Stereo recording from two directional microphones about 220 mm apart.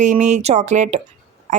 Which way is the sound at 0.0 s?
35° right (ahead or behind).